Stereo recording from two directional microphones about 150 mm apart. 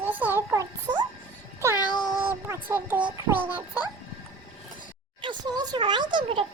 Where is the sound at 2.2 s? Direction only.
15° right (ahead or behind).